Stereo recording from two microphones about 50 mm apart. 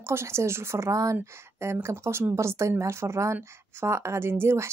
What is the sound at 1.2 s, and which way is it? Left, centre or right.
A woman's voice, right.